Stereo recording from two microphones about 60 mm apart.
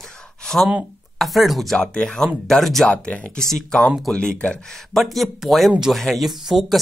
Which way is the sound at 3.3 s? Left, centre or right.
Centre.